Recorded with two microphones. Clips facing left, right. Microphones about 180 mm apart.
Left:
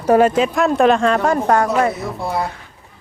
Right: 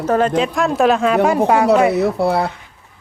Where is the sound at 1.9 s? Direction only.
70° right (ahead or behind).